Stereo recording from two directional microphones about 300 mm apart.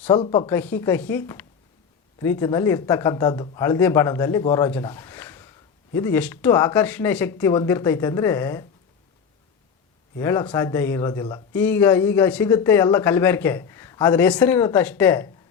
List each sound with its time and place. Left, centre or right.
0.0 s speech: centre
10.2 s speech: centre